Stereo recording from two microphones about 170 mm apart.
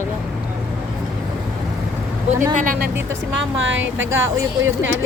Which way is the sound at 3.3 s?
90° right.